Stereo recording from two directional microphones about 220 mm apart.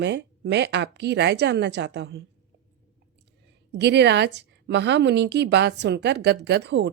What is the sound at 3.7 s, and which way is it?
A woman's voice, 50° right (ahead or behind).